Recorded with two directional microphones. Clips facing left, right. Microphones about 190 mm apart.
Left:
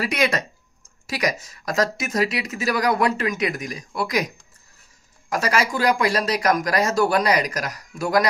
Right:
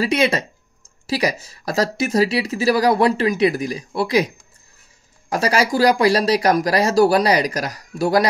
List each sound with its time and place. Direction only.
0.0 s speech: 25° right (ahead or behind)
5.3 s speech: 30° right (ahead or behind)